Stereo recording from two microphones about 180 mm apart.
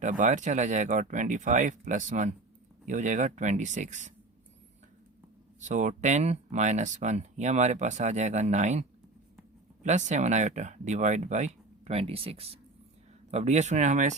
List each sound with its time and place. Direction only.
0.0 s speech: 45° right (ahead or behind)
5.5 s speech: 45° right (ahead or behind)